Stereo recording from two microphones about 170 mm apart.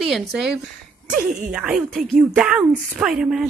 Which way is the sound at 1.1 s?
50° right (ahead or behind).